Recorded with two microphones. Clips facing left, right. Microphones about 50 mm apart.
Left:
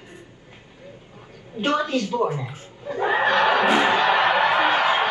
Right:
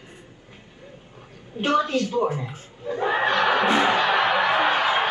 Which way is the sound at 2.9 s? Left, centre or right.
Left.